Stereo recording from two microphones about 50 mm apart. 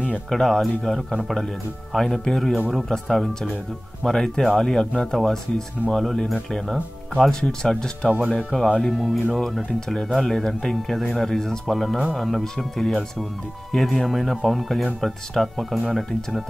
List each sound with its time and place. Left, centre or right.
0.3 s speech: centre
8.5 s speech: centre